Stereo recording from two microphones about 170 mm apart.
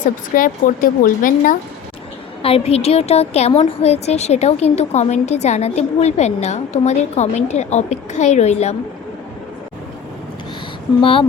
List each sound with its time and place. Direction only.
0.0 s speech: 50° left (ahead or behind)
2.4 s a woman's voice: 35° left (ahead or behind)
11.0 s a woman's voice: 30° left (ahead or behind)